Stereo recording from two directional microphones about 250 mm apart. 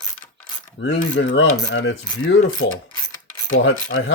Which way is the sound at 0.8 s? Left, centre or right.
Left.